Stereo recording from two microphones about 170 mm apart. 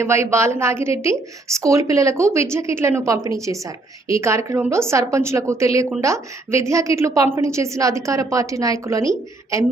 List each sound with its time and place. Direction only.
0.0 s a woman's voice: 15° right (ahead or behind)